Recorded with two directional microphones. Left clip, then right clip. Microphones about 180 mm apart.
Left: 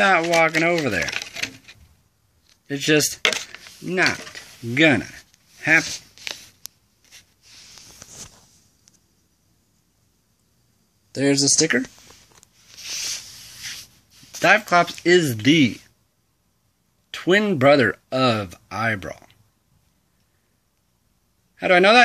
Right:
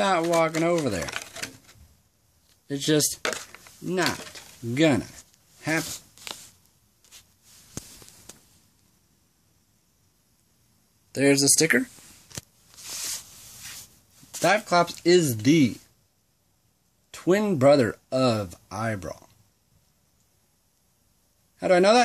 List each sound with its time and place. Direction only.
0.0 s speech: 10° right (ahead or behind)
3.3 s a sound: centre (ahead or behind)
3.8 s speech: 10° right (ahead or behind)
5.6 s a sound: 15° right (ahead or behind)
11.1 s speech: 10° right (ahead or behind)
12.8 s a sound: 5° right (ahead or behind)
14.3 s speech: 10° right (ahead or behind)
17.2 s speech: 15° right (ahead or behind)
21.5 s a man's voice: 20° right (ahead or behind)